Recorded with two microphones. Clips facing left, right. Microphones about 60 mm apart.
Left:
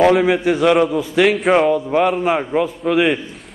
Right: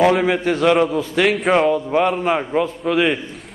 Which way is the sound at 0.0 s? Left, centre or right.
Centre.